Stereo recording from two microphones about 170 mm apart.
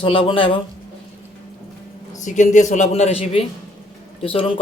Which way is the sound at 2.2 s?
45° left (ahead or behind).